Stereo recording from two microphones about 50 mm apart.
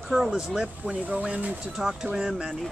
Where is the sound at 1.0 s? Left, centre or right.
Right.